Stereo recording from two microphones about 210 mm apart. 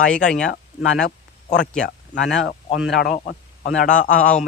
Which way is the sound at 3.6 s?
40° left (ahead or behind).